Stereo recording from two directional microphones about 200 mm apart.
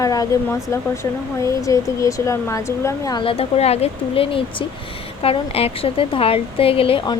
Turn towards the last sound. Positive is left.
turn(degrees=25)  # may be behind; listen again after turning